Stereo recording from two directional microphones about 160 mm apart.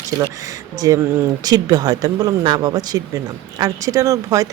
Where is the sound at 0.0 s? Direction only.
20° right (ahead or behind).